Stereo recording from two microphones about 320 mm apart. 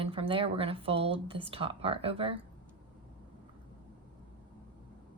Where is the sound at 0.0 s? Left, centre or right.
Centre.